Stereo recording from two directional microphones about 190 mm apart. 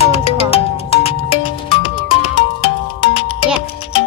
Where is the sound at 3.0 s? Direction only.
25° left (ahead or behind).